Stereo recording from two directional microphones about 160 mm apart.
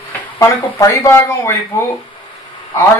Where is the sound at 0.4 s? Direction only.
10° left (ahead or behind).